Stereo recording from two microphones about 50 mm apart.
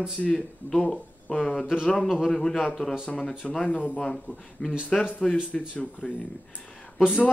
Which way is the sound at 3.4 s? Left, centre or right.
Centre.